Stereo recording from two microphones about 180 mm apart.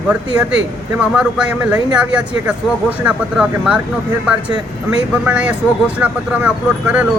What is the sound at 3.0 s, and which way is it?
Speech, 5° right (ahead or behind).